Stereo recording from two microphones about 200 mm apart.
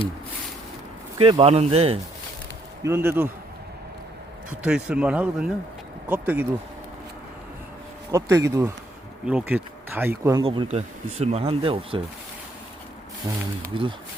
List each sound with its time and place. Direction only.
1.2 s speech: 30° right (ahead or behind)
2.8 s speech: 10° right (ahead or behind)
4.6 s speech: 5° right (ahead or behind)
8.1 s speech: 15° right (ahead or behind)
10.4 s speech: 25° right (ahead or behind)
13.2 s speech: 15° right (ahead or behind)